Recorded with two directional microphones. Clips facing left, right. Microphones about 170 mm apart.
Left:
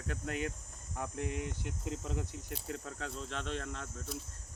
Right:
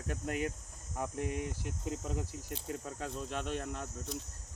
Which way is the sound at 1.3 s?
45° right (ahead or behind).